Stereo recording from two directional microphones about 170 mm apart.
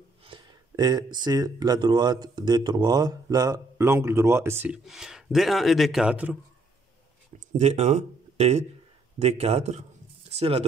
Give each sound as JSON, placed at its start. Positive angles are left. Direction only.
{"t": 0.2, "sound": "speech", "side_deg": -25}
{"t": 4.8, "sound": "speech", "side_deg": -5}
{"t": 7.3, "sound": "speech", "side_deg": -40}